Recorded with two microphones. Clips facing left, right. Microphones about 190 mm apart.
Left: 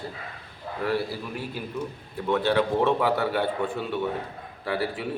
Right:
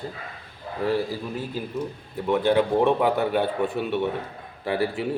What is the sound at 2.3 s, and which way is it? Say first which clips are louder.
A man's voice: right 3 dB; 15° right (ahead or behind).